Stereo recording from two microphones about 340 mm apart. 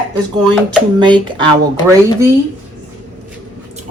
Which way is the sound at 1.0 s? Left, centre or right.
Centre.